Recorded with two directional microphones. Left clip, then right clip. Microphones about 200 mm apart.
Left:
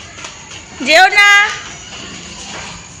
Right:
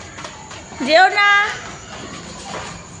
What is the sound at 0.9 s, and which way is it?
Speech, 5° left (ahead or behind).